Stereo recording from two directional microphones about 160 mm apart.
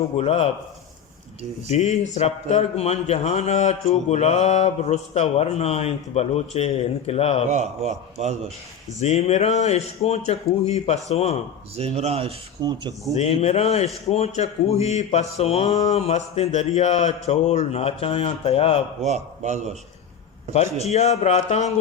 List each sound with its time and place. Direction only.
0.2 s speech: 40° left (ahead or behind)
1.7 s speech: 45° left (ahead or behind)
7.5 s a man's voice: 45° right (ahead or behind)
9.0 s speech: 40° left (ahead or behind)
11.8 s speech: 40° right (ahead or behind)
12.6 s speech: 25° right (ahead or behind)
13.1 s speech: 40° left (ahead or behind)
19.0 s a man's voice: 45° right (ahead or behind)
20.8 s speech: 40° left (ahead or behind)